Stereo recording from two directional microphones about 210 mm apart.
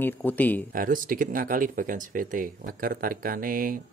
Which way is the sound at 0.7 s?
40° right (ahead or behind).